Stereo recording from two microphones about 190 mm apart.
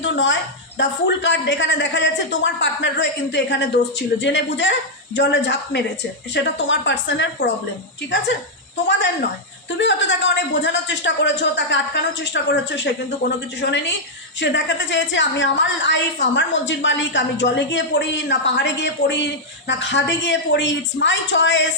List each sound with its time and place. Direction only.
0.0 s a sound: 80° left
0.8 s a woman's voice: 70° left (ahead or behind)
9.7 s a woman's voice: 70° left (ahead or behind)